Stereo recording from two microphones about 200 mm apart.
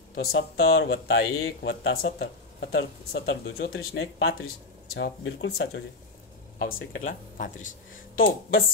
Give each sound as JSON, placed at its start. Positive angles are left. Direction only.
{"t": 0.6, "sound": "speech", "side_deg": 50}
{"t": 6.6, "sound": "speech", "side_deg": 45}